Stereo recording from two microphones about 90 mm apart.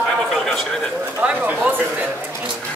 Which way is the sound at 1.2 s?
15° right (ahead or behind).